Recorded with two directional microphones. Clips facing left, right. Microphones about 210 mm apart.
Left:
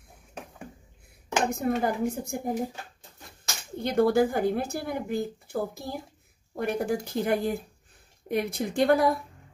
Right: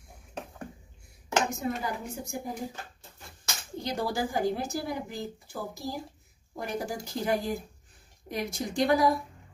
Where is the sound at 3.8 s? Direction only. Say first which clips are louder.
Left 9 dB; 55° left (ahead or behind).